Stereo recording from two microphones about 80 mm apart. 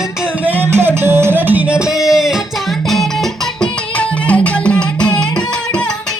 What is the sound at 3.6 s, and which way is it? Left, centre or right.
Music, centre.